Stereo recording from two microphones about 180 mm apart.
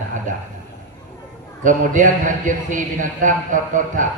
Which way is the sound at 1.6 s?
45° right (ahead or behind).